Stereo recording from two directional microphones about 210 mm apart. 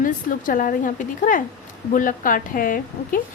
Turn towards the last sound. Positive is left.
turn(degrees=40)  # may be behind; listen again after turning